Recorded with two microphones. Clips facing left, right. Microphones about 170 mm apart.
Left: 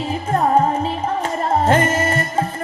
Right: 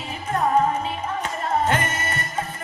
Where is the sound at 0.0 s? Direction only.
35° left (ahead or behind).